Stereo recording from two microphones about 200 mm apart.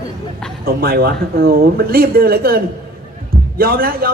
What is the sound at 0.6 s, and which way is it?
Speech, 50° right (ahead or behind).